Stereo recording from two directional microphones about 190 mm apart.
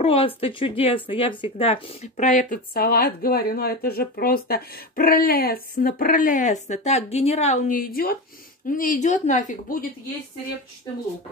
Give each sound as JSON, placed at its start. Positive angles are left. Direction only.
{"t": 0.0, "sound": "speech", "side_deg": 30}